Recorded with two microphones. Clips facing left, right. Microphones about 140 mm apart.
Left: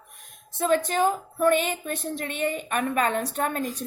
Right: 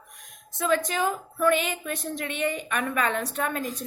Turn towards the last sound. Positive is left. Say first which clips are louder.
# left 2 dB
turn(degrees=40)  # may be behind; listen again after turning